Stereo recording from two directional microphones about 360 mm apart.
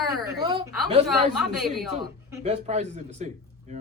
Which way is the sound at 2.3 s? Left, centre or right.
Centre.